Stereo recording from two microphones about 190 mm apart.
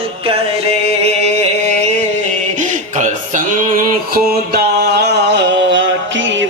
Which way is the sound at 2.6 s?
40° right (ahead or behind).